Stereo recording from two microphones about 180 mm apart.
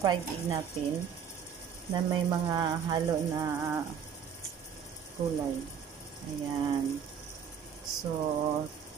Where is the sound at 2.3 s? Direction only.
25° right (ahead or behind).